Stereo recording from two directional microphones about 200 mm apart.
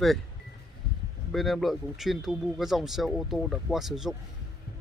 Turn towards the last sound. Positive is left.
turn(degrees=0)  # may be behind; listen again after turning